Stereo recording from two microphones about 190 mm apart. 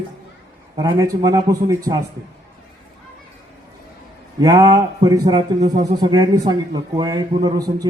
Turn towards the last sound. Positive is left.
turn(degrees=-20)  # may be behind; listen again after turning